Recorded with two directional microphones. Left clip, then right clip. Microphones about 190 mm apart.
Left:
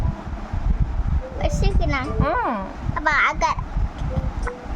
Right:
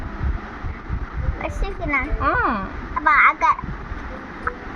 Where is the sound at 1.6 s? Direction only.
20° left (ahead or behind).